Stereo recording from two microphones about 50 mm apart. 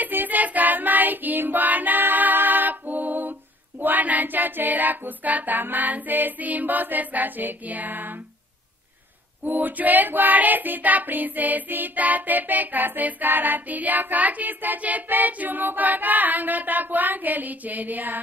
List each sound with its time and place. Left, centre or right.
0.0 s child singing: right
9.4 s child singing: right